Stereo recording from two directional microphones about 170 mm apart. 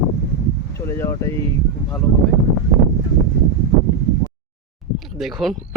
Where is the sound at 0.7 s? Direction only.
15° left (ahead or behind).